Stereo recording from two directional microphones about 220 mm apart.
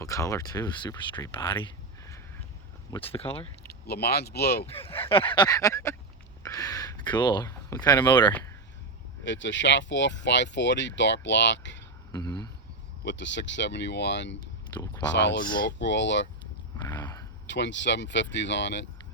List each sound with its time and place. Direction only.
0.0 s speech: 15° left (ahead or behind)
3.8 s speech: 45° left (ahead or behind)
4.7 s speech: 25° left (ahead or behind)
9.2 s speech: 55° left (ahead or behind)
12.1 s a sound: 20° left (ahead or behind)
13.1 s speech: 55° left (ahead or behind)
16.7 s a sound: 20° left (ahead or behind)
17.5 s speech: 55° left (ahead or behind)